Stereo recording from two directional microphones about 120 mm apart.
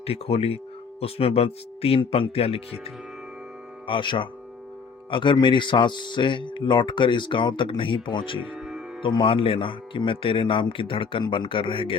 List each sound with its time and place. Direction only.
0.0 s speech: 55° left (ahead or behind)
3.8 s speech: 45° left (ahead or behind)
8.4 s speech: 15° right (ahead or behind)
9.0 s speech: 45° left (ahead or behind)